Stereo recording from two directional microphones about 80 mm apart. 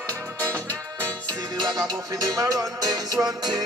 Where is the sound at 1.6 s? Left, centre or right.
Right.